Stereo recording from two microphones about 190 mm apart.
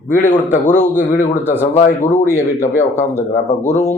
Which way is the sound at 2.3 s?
15° left (ahead or behind).